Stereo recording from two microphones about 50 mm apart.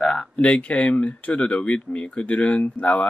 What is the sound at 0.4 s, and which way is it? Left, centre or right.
Speech, left.